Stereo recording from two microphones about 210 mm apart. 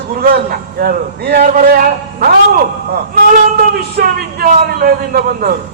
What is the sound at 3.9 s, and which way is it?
A man's voice, 45° right (ahead or behind).